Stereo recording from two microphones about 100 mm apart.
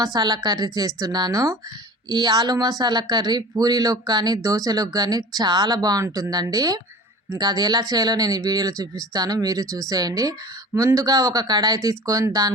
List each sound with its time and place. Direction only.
0.0 s speech: 45° right (ahead or behind)